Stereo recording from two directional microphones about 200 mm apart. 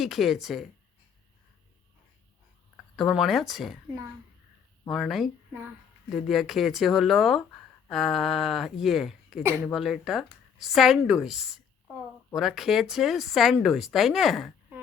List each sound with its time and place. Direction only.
0.0 s speech: centre (ahead or behind)
2.9 s speech: centre (ahead or behind)
4.9 s speech: centre (ahead or behind)